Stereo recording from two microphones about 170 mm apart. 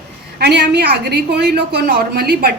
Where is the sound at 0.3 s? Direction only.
75° right (ahead or behind).